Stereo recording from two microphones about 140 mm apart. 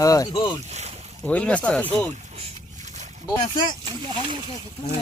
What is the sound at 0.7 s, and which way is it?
Boat, 50° right (ahead or behind).